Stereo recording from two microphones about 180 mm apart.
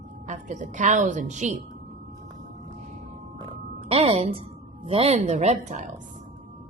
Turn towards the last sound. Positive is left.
turn(degrees=-40)  # may be behind; listen again after turning